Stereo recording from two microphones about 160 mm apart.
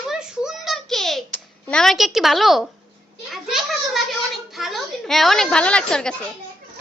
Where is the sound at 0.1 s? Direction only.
5° right (ahead or behind).